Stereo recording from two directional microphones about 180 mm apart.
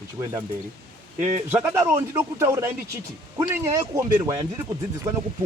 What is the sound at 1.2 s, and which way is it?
Speech, 10° right (ahead or behind).